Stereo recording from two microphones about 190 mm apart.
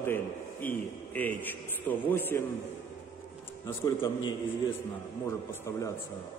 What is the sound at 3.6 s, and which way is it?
A man's voice, 15° left (ahead or behind).